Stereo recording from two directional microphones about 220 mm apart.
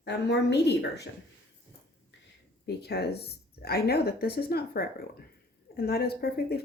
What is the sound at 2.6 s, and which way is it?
Speech, 45° left (ahead or behind).